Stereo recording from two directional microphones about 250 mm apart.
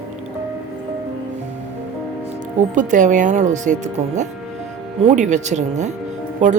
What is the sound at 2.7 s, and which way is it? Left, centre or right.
A woman's voice, right.